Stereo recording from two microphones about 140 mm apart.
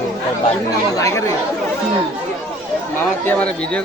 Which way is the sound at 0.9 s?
25° left (ahead or behind).